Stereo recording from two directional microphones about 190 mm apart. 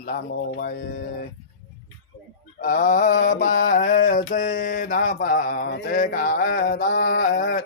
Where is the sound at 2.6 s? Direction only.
45° left (ahead or behind).